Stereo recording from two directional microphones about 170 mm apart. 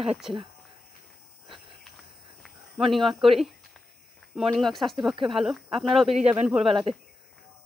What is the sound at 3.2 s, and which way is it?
Speech, centre (ahead or behind).